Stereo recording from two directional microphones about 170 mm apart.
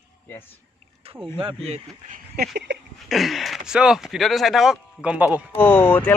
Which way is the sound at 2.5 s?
90° right.